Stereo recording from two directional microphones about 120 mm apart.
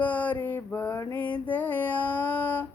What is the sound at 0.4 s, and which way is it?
Mantra, 15° left (ahead or behind).